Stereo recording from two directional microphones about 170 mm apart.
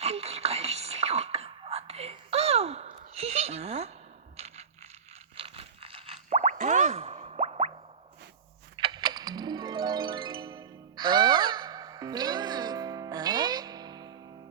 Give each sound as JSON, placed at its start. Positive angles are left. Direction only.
{"t": 0.0, "sound": "a sound", "side_deg": -35}
{"t": 4.4, "sound": "coin", "side_deg": -40}
{"t": 5.4, "sound": "plop", "side_deg": -35}
{"t": 8.7, "sound": "music", "side_deg": -25}